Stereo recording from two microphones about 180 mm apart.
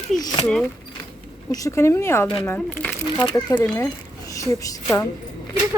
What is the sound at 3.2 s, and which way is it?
Speech, 25° left (ahead or behind).